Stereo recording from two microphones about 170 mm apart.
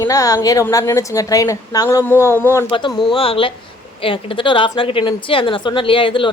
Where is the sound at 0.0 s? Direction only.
20° left (ahead or behind).